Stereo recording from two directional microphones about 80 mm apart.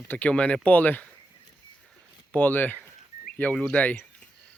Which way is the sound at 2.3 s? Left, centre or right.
Centre.